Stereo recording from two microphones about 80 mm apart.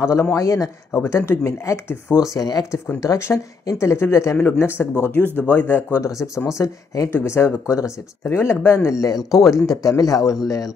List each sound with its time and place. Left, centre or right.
0.0 s speech: left
2.3 s speech: left
3.0 s speech: left
5.9 s speech: left
7.1 s speech: left
8.8 s speech: left